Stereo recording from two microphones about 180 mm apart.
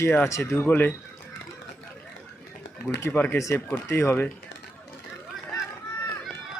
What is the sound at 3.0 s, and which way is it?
Speech, 10° left (ahead or behind).